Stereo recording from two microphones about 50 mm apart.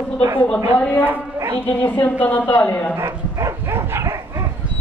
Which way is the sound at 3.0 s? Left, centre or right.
Right.